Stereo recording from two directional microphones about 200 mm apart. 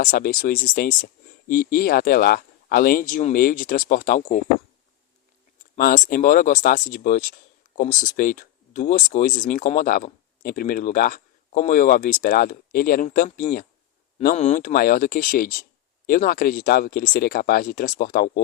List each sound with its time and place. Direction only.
0.0 s speech: 45° left (ahead or behind)
5.7 s speech: 45° left (ahead or behind)